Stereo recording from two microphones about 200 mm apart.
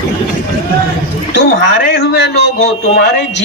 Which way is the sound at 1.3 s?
60° left (ahead or behind).